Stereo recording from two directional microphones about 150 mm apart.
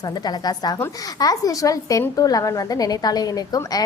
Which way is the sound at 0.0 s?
25° left (ahead or behind).